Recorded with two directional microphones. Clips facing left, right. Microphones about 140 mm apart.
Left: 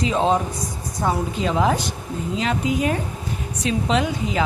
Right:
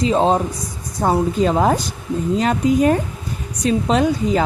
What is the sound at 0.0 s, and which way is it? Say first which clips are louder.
A woman's voice: right 4 dB; 35° right (ahead or behind).